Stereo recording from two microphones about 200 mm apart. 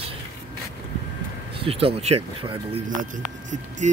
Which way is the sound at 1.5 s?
25° right (ahead or behind).